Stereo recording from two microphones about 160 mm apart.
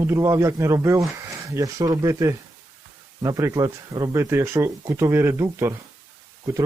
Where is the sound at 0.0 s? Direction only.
20° right (ahead or behind).